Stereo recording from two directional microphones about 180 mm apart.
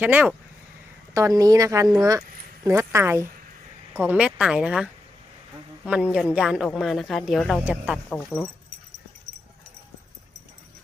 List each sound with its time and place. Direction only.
0.0 s a woman's voice: 10° right (ahead or behind)
8.1 s speech: 5° left (ahead or behind)